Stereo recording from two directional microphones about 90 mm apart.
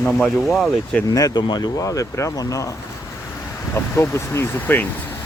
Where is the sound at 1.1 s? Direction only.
45° left (ahead or behind).